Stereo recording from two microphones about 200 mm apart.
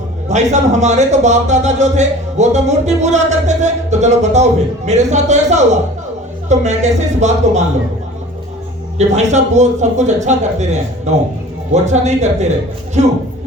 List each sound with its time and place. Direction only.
0.3 s a man's voice: 35° right (ahead or behind)
9.0 s a man's voice: 35° right (ahead or behind)